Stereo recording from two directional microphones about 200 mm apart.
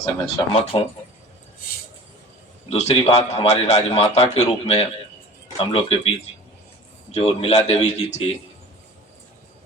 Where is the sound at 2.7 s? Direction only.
30° left (ahead or behind).